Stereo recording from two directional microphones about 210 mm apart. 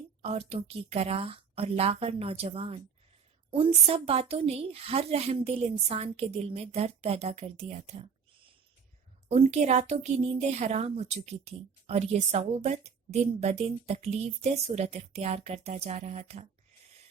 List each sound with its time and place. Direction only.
0.2 s a woman's voice: 30° right (ahead or behind)
9.3 s a woman's voice: 35° right (ahead or behind)